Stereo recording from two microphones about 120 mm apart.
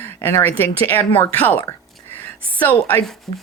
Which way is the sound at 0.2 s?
20° left (ahead or behind).